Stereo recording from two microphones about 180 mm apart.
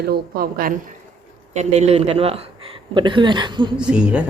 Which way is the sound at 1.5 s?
40° right (ahead or behind).